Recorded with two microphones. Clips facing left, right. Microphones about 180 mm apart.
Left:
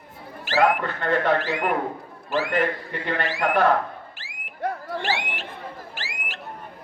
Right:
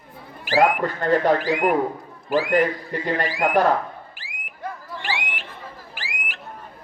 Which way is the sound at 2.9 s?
40° right (ahead or behind).